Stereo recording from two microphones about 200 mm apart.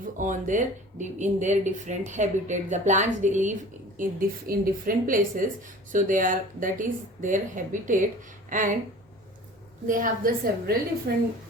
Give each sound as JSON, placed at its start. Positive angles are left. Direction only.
{"t": 0.0, "sound": "speech", "side_deg": -40}
{"t": 9.8, "sound": "a woman's voice", "side_deg": -40}